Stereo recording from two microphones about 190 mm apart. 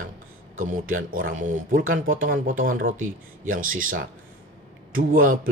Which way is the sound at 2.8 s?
90° right.